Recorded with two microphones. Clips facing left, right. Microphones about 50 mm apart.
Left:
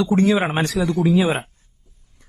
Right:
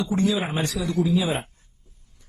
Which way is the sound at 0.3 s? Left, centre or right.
Left.